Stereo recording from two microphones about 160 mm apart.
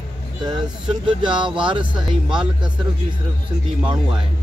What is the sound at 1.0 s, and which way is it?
Speech, 30° right (ahead or behind).